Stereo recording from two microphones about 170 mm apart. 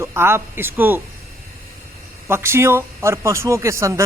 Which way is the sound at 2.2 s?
15° right (ahead or behind).